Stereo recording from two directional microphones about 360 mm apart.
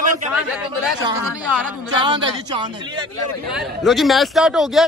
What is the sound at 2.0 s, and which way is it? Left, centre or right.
A man's voice, centre.